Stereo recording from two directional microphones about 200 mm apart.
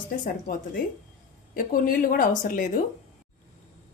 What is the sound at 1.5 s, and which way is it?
Speech, 45° left (ahead or behind).